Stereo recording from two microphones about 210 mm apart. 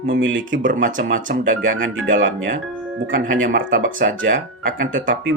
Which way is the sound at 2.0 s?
65° right (ahead or behind).